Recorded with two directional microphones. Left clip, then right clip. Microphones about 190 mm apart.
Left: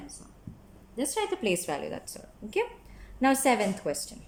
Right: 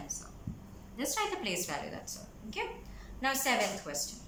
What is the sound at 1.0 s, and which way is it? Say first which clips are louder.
Speech: left 4 dB; 35° left (ahead or behind).